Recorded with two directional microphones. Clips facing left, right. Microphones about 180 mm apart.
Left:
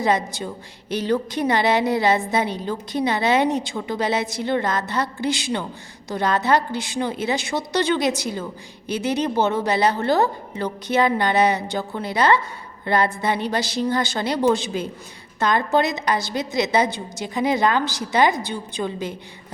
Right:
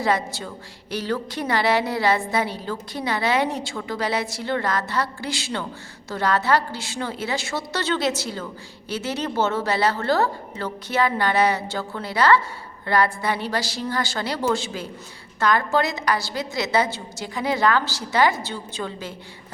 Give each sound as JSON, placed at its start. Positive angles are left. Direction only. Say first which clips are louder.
{"t": 0.0, "sound": "a woman's voice", "louder": "left 2 dB", "side_deg": 20}